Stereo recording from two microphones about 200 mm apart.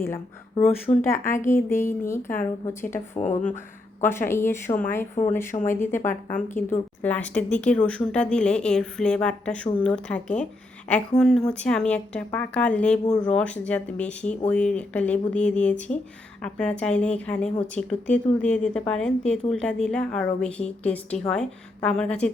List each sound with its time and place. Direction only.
0.0 s speech: 10° left (ahead or behind)
1.3 s a woman's voice: 40° left (ahead or behind)
1.7 s speech: 10° left (ahead or behind)
3.2 s a woman's voice: 35° left (ahead or behind)
4.0 s speech: 10° left (ahead or behind)
6.0 s a woman's voice: 40° left (ahead or behind)
6.5 s speech: 10° left (ahead or behind)